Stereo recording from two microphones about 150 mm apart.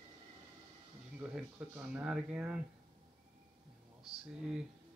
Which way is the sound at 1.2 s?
10° right (ahead or behind).